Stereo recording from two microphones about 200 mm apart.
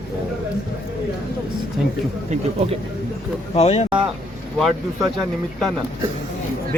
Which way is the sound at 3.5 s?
30° left (ahead or behind).